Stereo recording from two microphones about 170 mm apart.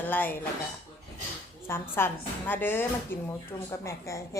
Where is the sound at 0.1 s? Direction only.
10° left (ahead or behind).